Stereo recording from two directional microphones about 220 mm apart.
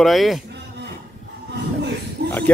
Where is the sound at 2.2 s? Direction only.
50° right (ahead or behind).